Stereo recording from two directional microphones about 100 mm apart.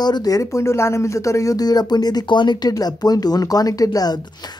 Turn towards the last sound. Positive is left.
turn(degrees=40)  # may be behind; listen again after turning